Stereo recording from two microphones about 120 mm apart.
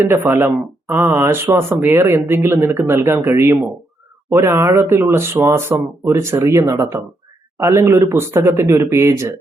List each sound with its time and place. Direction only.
0.0 s speech: 20° right (ahead or behind)